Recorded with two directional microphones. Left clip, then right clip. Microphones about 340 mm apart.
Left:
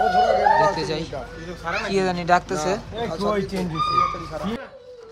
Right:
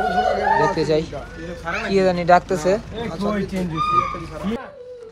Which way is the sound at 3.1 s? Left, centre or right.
Left.